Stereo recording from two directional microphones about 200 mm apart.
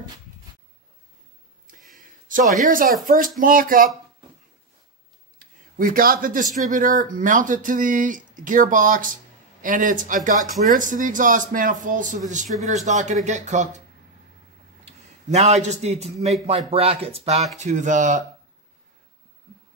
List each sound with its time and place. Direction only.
2.0 s a sound: 40° right (ahead or behind)
3.3 s a man's voice: 45° right (ahead or behind)
5.8 s a man's voice: 45° right (ahead or behind)
15.3 s speech: 35° right (ahead or behind)